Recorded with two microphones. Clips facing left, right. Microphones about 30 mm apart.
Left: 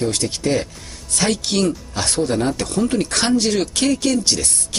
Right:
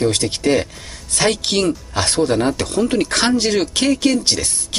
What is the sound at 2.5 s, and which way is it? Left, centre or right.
Speech, right.